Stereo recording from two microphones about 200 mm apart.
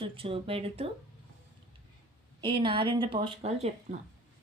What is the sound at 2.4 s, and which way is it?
A woman's voice, 25° right (ahead or behind).